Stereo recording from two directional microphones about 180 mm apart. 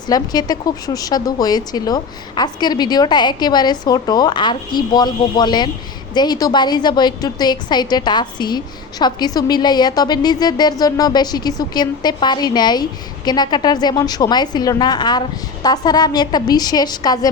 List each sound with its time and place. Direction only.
0.1 s a woman's voice: 20° left (ahead or behind)